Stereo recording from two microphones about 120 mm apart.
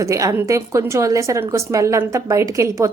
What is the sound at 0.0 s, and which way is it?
Speech, 25° right (ahead or behind).